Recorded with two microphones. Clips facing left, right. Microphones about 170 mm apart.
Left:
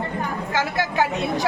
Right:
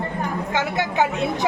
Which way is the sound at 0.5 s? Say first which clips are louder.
Even; 20° right (ahead or behind).